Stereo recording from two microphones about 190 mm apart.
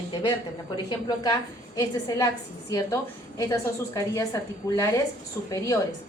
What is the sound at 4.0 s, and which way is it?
Speech, 15° left (ahead or behind).